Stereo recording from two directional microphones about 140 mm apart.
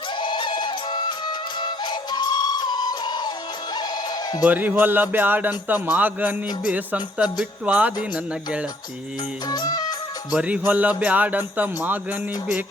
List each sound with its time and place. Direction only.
0.2 s music: 35° left (ahead or behind)
4.4 s music: 10° right (ahead or behind)
9.5 s music: 30° left (ahead or behind)
10.3 s music: 10° right (ahead or behind)